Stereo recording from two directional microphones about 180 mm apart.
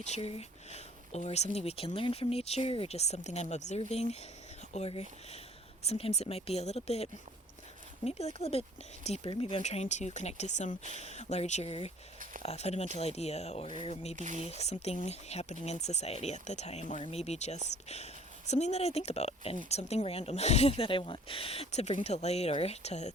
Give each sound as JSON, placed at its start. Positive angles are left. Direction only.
{"t": 0.0, "sound": "speech", "side_deg": 35}
{"t": 14.2, "sound": "speech", "side_deg": -45}
{"t": 14.5, "sound": "speech", "side_deg": 35}